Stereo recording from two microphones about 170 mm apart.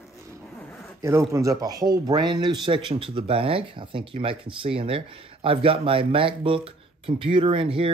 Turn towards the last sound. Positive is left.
turn(degrees=-30)  # may be behind; listen again after turning